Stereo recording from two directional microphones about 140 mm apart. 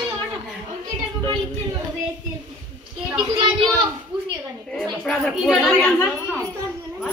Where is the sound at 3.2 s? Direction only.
35° right (ahead or behind).